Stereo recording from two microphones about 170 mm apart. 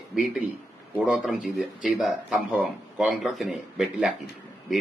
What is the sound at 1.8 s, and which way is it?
A man's voice, centre (ahead or behind).